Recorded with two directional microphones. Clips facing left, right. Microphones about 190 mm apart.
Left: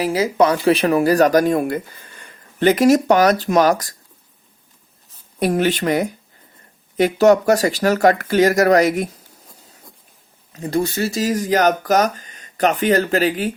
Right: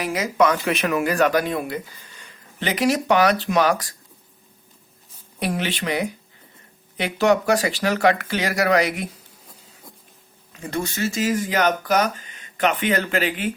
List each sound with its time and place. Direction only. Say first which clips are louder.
0.0 s speech: left 4 dB; 30° left (ahead or behind)
5.4 s speech: left 8 dB; 45° left (ahead or behind)
10.5 s speech: left 7 dB; 35° left (ahead or behind)